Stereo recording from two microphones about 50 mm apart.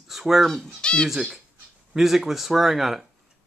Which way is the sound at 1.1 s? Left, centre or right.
Centre.